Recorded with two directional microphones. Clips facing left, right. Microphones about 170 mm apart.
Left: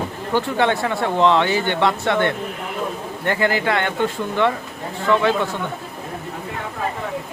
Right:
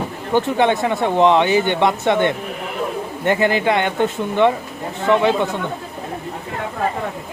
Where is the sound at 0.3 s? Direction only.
20° right (ahead or behind).